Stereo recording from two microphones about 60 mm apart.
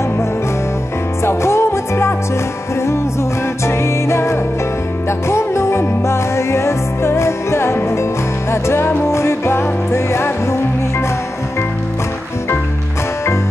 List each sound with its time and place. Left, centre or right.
1.2 s music: left
3.6 s music: left